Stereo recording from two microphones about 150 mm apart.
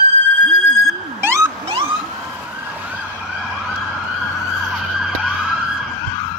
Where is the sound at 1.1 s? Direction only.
15° right (ahead or behind).